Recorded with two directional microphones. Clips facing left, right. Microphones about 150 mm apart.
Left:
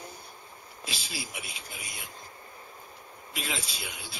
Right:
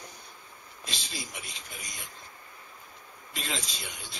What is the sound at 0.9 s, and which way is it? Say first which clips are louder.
Speech: left 1 dB; 5° left (ahead or behind).